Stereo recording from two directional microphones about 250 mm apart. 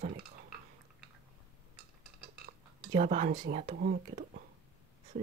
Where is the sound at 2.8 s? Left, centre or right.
Right.